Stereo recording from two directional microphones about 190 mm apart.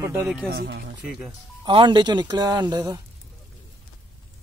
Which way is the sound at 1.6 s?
25° right (ahead or behind).